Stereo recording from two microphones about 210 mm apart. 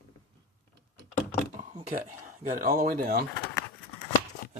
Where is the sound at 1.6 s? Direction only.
35° right (ahead or behind).